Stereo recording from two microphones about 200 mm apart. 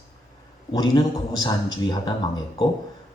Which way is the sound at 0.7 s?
20° left (ahead or behind).